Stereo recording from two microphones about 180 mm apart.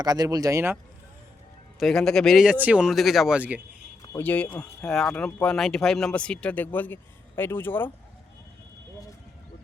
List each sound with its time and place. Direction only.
0.0 s speech: 20° right (ahead or behind)
1.8 s speech: 5° left (ahead or behind)
4.2 s speech: 10° left (ahead or behind)